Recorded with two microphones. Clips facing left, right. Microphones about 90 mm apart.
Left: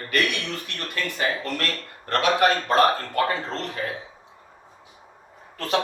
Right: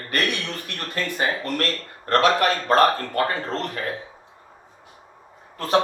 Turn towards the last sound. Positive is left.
turn(degrees=-35)  # may be behind; listen again after turning